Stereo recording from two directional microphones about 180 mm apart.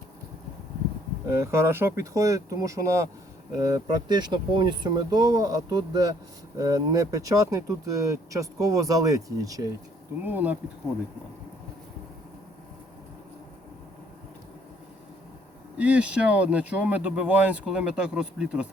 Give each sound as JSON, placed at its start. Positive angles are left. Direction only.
{"t": 1.3, "sound": "speech", "side_deg": -15}
{"t": 10.2, "sound": "speech", "side_deg": -10}
{"t": 15.8, "sound": "speech", "side_deg": -5}